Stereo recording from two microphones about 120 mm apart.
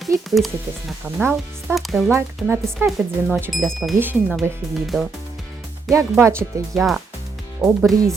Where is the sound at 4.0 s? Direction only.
15° right (ahead or behind).